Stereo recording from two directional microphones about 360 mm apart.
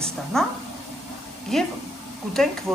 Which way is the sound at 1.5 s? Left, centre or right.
Centre.